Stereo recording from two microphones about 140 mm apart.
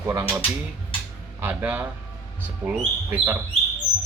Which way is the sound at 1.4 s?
15° right (ahead or behind).